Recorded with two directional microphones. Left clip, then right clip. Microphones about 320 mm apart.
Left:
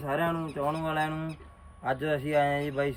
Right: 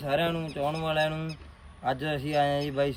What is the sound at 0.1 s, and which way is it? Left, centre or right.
Speech, centre.